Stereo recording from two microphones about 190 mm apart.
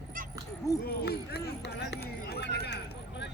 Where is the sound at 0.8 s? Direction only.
55° left (ahead or behind).